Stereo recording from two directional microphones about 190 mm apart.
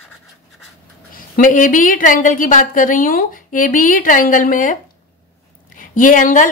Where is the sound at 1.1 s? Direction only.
45° left (ahead or behind).